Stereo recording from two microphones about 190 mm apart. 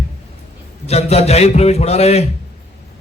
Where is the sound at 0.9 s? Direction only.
35° left (ahead or behind).